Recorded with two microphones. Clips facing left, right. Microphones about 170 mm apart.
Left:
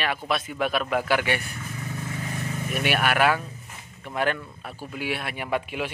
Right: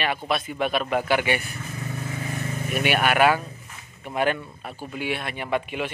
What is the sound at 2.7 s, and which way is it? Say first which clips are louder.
Speech: right 3 dB; centre (ahead or behind).